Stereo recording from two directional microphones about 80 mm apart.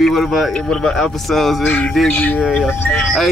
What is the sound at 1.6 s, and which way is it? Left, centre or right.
Speech, centre.